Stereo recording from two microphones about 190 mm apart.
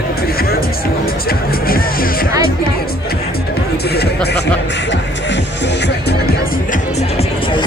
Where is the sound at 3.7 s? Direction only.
55° left (ahead or behind).